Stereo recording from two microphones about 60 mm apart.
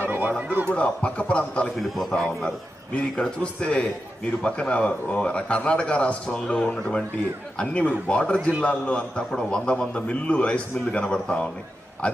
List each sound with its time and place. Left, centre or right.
0.1 s a sound: right
0.7 s a man's voice: left
1.7 s a man's voice: centre